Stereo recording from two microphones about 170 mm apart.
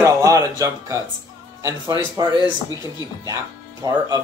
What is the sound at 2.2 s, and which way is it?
Speech, 25° right (ahead or behind).